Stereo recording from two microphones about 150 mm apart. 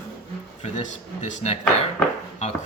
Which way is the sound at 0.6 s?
45° left (ahead or behind).